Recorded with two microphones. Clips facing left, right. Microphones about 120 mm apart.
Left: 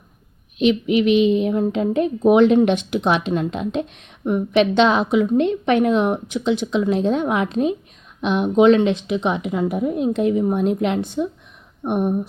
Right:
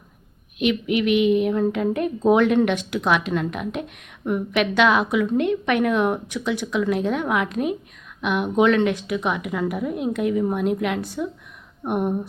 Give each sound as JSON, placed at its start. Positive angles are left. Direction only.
{"t": 0.6, "sound": "a woman's voice", "side_deg": 25}